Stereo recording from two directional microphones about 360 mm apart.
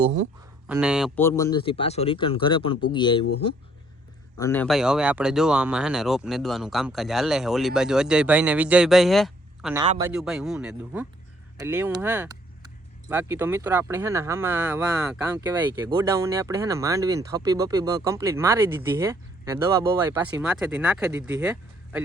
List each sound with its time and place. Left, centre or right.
0.0 s speech: centre
0.7 s speech: centre
4.4 s speech: centre
9.8 s speech: centre
10.1 s speech: centre